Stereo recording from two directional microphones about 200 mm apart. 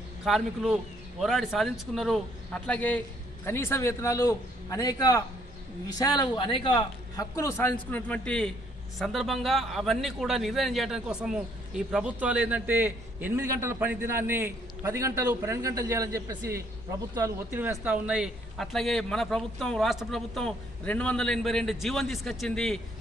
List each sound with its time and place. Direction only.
0.2 s a man's voice: centre (ahead or behind)